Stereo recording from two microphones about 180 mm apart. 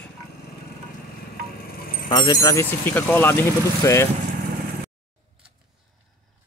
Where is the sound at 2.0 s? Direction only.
25° left (ahead or behind).